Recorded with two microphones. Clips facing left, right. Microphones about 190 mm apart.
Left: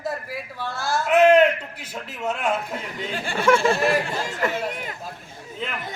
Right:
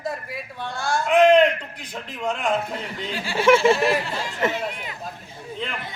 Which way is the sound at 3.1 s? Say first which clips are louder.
Right 2 dB; 50° left (ahead or behind).